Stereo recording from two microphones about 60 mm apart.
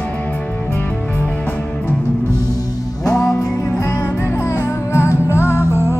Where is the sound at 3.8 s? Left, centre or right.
Left.